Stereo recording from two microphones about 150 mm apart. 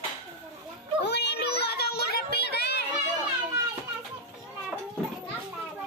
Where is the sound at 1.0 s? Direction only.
90° left.